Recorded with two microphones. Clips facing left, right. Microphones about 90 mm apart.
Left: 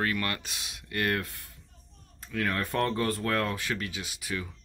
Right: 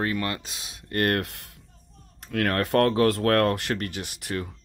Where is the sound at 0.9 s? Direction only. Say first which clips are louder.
Right 5 dB; 55° right (ahead or behind).